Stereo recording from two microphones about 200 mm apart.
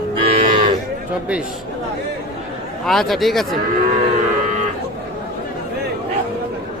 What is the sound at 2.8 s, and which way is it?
Speech, centre (ahead or behind).